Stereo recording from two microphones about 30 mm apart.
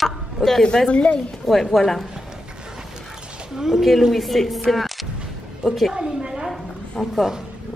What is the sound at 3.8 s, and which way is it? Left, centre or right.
A woman's voice, centre.